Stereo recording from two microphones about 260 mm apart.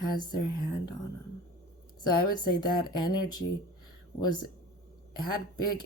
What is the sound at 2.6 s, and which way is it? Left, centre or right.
Speech, centre.